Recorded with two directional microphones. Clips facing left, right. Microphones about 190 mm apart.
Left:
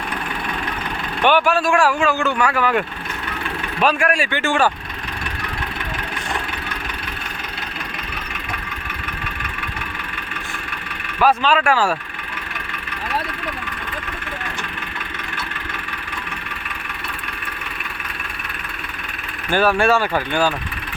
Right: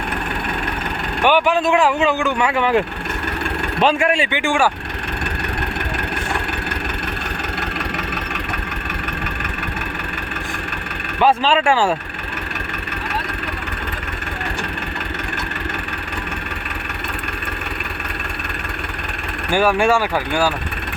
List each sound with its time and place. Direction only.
1.2 s speech: 15° right (ahead or behind)
11.2 s speech: 25° right (ahead or behind)
19.5 s speech: 15° right (ahead or behind)